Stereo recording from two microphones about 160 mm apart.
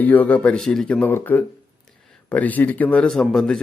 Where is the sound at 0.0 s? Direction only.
10° left (ahead or behind).